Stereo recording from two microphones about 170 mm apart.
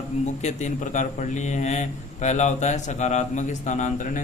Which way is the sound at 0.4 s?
45° left (ahead or behind).